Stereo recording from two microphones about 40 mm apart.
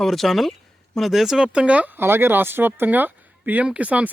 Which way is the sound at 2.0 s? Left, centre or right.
Right.